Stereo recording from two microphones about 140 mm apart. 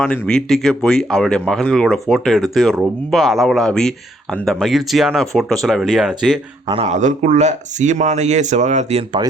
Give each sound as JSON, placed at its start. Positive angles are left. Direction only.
{"t": 0.0, "sound": "speech", "side_deg": 5}
{"t": 6.8, "sound": "speech", "side_deg": -55}